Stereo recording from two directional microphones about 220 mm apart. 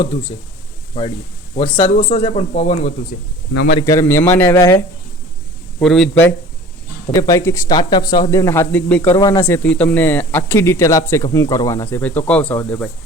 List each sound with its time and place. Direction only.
0.9 s speech: 25° left (ahead or behind)
3.5 s a man's voice: 50° left (ahead or behind)
3.8 s speech: 15° left (ahead or behind)
5.8 s speech: centre (ahead or behind)
9.1 s speech: 20° left (ahead or behind)
9.6 s speech: 5° left (ahead or behind)